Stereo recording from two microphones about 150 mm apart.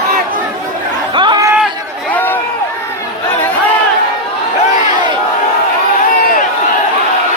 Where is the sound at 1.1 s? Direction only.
30° right (ahead or behind).